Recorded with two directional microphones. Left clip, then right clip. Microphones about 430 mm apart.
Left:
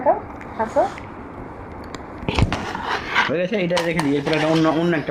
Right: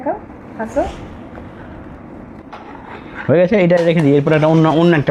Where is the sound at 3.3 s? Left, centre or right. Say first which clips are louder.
Right 9 dB; right.